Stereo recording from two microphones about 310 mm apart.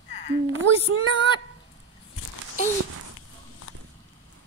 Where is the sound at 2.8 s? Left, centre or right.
Right.